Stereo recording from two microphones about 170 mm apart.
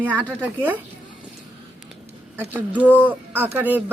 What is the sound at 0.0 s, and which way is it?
Speech, 10° right (ahead or behind).